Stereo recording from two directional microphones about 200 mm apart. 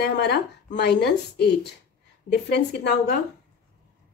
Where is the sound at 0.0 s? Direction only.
55° left (ahead or behind).